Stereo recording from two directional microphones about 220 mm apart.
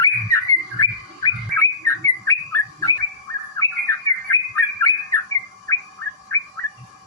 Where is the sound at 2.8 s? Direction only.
15° left (ahead or behind).